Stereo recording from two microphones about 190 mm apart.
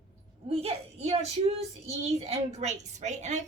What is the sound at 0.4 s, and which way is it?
A child's voice, 30° right (ahead or behind).